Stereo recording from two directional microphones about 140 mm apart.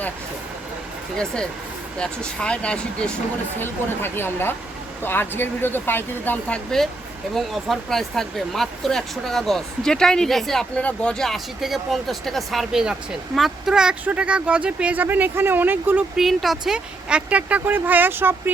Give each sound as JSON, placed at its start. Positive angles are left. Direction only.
{"t": 1.1, "sound": "speech", "side_deg": 5}
{"t": 16.1, "sound": "speech", "side_deg": 0}